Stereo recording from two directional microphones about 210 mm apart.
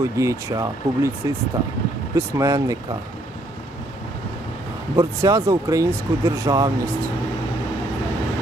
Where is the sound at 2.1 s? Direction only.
15° right (ahead or behind).